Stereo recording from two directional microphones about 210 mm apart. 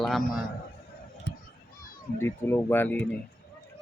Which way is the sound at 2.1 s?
10° left (ahead or behind).